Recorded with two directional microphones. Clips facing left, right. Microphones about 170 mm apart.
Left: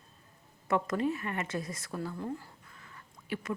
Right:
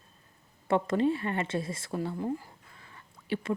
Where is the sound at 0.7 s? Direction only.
30° right (ahead or behind).